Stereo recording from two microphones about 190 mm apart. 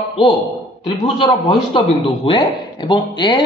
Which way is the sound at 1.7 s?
30° left (ahead or behind).